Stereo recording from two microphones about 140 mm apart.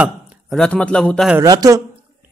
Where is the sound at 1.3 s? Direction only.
25° right (ahead or behind).